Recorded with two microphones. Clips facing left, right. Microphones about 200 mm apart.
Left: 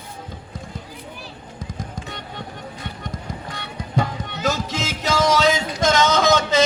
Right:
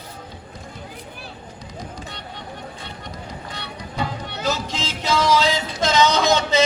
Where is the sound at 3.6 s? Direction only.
45° left (ahead or behind).